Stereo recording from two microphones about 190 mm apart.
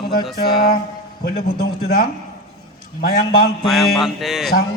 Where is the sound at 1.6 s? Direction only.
55° left (ahead or behind).